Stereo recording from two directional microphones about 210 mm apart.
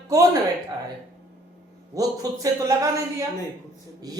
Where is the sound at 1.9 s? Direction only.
15° right (ahead or behind).